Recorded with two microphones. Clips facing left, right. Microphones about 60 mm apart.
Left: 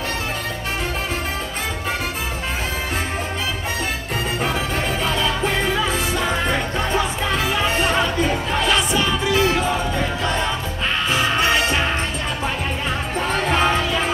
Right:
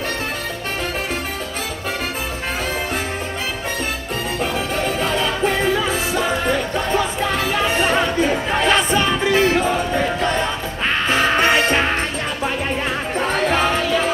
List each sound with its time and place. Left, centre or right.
4.8 s music: right
7.8 s music: right
11.1 s music: right
13.4 s music: right